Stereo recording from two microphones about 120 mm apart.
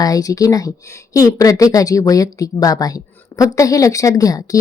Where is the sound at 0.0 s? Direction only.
30° left (ahead or behind).